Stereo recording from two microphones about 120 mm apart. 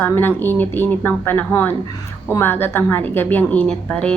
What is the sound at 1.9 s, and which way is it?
Speech, 30° left (ahead or behind).